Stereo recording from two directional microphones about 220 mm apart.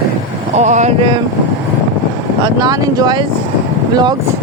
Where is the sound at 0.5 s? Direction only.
30° right (ahead or behind).